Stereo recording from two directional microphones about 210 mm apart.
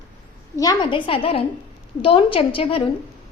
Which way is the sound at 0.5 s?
20° left (ahead or behind).